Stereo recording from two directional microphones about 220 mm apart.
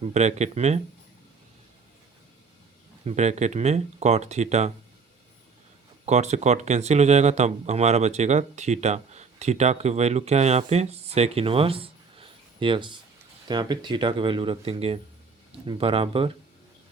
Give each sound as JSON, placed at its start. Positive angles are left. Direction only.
{"t": 0.1, "sound": "speech", "side_deg": -30}
{"t": 3.0, "sound": "speech", "side_deg": -30}
{"t": 6.1, "sound": "speech", "side_deg": -30}